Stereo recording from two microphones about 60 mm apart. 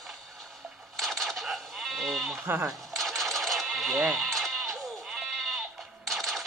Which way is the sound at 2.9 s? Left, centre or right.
Centre.